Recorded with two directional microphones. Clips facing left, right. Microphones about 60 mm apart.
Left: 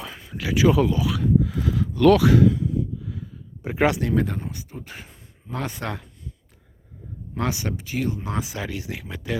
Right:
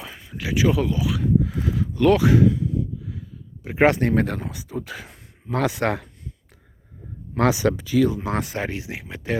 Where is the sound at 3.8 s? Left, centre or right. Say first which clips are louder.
Right 3 dB; right.